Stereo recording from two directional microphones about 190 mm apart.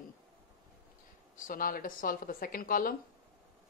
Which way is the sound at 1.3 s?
45° left (ahead or behind).